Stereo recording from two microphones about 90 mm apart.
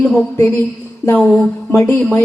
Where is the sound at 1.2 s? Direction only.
20° left (ahead or behind).